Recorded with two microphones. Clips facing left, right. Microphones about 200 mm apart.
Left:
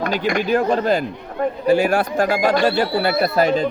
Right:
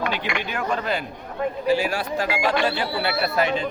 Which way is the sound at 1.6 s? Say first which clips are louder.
Left 7 dB; 50° left (ahead or behind).